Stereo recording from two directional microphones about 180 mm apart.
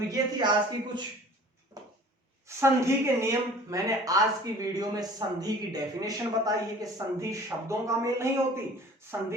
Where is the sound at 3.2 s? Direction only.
15° right (ahead or behind).